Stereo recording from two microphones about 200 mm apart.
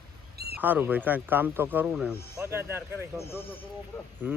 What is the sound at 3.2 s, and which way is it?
Speech, 15° left (ahead or behind).